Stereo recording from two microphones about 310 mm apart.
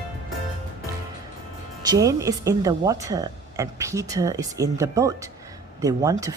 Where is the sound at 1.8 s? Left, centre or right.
Centre.